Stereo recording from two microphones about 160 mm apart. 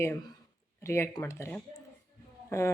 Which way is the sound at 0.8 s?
15° left (ahead or behind).